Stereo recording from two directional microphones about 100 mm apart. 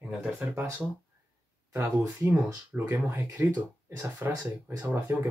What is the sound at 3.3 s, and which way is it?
Speech, 20° right (ahead or behind).